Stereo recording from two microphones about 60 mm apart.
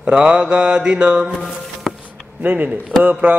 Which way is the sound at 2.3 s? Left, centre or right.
Right.